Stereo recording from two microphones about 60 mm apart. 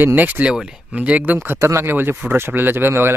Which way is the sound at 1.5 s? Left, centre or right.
Right.